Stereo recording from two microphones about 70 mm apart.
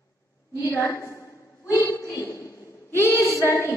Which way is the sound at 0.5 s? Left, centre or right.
Left.